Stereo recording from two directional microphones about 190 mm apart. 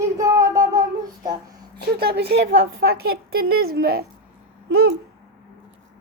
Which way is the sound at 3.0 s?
55° right (ahead or behind).